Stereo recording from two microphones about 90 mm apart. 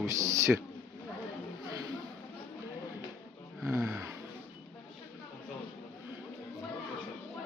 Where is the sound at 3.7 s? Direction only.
30° right (ahead or behind).